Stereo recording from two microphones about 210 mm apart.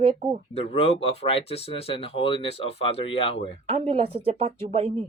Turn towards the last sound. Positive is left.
turn(degrees=-25)  # may be behind; listen again after turning